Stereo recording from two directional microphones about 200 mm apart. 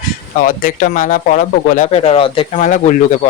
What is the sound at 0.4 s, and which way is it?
Speech, 40° left (ahead or behind).